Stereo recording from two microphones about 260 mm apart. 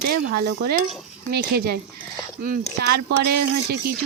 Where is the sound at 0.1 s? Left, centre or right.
Right.